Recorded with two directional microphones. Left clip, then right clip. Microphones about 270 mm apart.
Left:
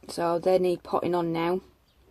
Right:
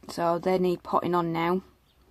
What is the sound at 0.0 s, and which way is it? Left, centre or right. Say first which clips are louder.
Speech: left 1 dB; right.